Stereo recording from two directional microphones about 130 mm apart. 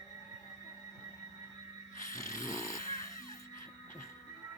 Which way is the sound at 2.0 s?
25° left (ahead or behind).